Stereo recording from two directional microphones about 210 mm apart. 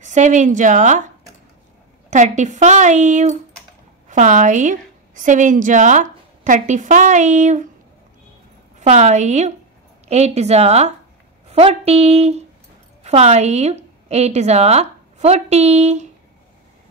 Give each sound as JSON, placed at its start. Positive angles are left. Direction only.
{"t": 0.0, "sound": "a woman's voice", "side_deg": -35}
{"t": 8.7, "sound": "a woman's voice", "side_deg": -35}